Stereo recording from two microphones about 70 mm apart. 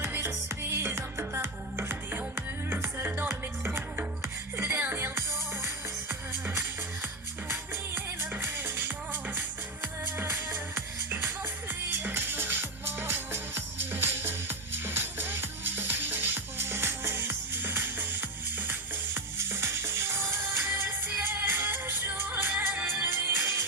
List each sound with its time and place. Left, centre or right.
0.0 s music: right
6.6 s music: right